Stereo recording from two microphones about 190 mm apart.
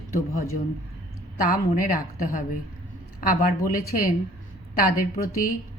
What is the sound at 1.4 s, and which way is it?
Speech, 45° left (ahead or behind).